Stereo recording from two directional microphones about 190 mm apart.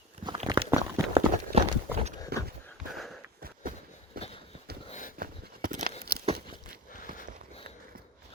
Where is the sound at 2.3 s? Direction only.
55° right (ahead or behind).